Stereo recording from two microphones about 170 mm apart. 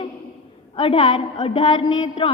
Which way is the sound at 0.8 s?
30° left (ahead or behind).